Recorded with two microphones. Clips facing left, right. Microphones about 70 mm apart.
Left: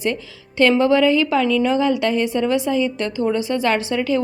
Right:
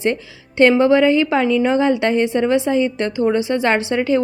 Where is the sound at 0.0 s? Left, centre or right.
Right.